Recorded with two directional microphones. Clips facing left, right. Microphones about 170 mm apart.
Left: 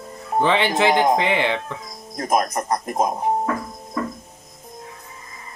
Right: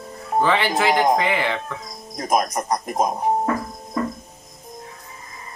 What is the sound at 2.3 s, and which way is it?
Speech, 15° right (ahead or behind).